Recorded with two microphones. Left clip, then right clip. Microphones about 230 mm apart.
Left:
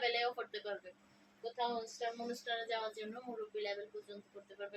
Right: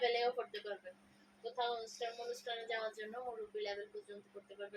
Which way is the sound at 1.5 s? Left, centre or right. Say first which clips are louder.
Left 1 dB; centre.